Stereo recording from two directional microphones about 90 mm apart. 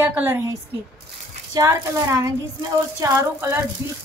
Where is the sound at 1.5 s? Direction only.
40° right (ahead or behind).